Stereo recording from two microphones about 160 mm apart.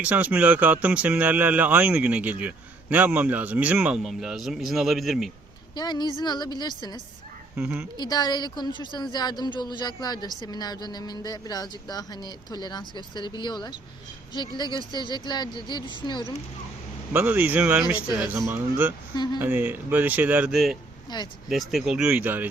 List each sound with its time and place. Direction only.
0.0 s speech: 10° right (ahead or behind)
5.7 s a woman's voice: 25° left (ahead or behind)
7.5 s speech: 10° right (ahead or behind)
7.9 s a woman's voice: 25° left (ahead or behind)
17.1 s speech: 10° right (ahead or behind)
19.1 s a woman's voice: 25° left (ahead or behind)
19.4 s speech: 10° right (ahead or behind)
21.1 s a woman's voice: 25° left (ahead or behind)
21.5 s speech: centre (ahead or behind)